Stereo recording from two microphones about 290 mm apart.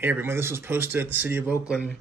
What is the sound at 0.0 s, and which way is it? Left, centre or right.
Speech, centre.